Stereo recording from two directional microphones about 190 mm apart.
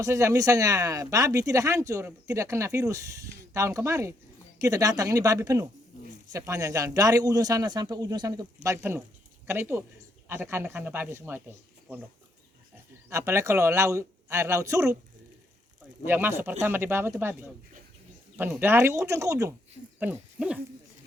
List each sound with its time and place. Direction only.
0.0 s a man's voice: 15° right (ahead or behind)
13.1 s speech: 15° right (ahead or behind)
16.0 s speech: 10° right (ahead or behind)